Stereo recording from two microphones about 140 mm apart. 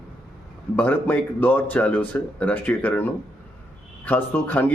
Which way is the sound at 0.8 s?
10° left (ahead or behind).